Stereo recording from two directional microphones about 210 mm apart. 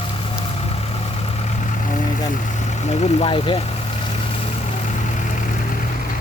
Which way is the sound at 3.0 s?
25° left (ahead or behind).